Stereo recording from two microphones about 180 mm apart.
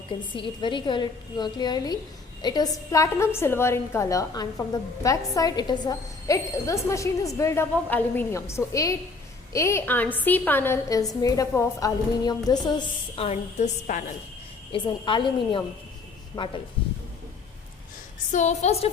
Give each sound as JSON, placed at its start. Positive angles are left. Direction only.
{"t": 0.3, "sound": "a woman's voice", "side_deg": 25}
{"t": 13.2, "sound": "a woman's voice", "side_deg": 40}
{"t": 14.7, "sound": "a woman's voice", "side_deg": 25}
{"t": 18.3, "sound": "a woman's voice", "side_deg": 40}